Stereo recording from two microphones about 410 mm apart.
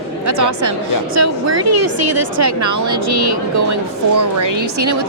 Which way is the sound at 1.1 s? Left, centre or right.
Right.